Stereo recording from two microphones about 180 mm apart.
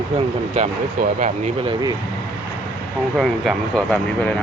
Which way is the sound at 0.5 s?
45° right (ahead or behind).